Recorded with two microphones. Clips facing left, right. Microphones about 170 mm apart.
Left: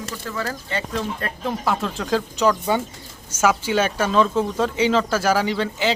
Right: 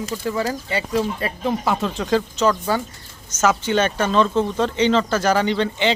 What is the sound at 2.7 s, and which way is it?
Speech, 20° left (ahead or behind).